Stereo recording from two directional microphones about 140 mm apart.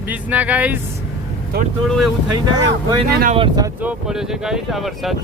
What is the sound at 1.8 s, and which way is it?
Speech, centre (ahead or behind).